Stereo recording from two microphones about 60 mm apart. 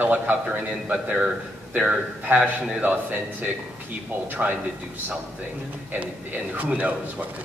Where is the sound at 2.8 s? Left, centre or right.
Right.